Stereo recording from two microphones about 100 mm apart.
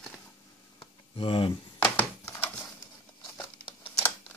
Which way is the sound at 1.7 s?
15° left (ahead or behind).